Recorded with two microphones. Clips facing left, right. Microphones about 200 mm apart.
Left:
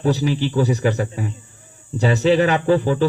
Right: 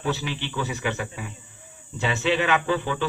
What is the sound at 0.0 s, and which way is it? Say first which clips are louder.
Speech: left 9 dB; 40° left (ahead or behind).